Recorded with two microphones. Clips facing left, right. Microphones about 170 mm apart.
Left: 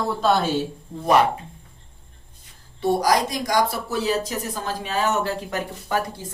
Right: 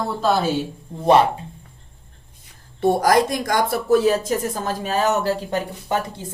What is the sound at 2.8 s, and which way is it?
Speech, 55° right (ahead or behind).